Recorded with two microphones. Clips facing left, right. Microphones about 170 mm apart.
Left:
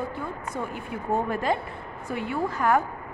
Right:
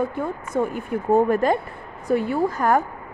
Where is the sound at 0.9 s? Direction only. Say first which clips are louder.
Right 8 dB; 45° right (ahead or behind).